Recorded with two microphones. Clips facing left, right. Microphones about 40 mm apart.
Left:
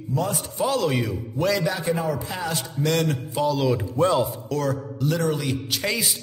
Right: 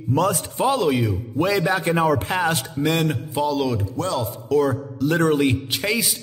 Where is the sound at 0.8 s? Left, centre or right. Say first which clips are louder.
Right 3 dB; centre.